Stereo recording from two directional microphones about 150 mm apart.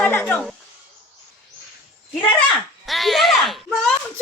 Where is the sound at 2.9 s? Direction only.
Centre (ahead or behind).